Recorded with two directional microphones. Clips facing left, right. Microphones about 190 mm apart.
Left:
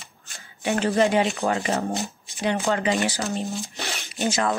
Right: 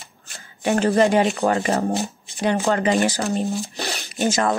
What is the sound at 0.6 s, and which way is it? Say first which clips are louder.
Speech: right 4 dB; 40° right (ahead or behind).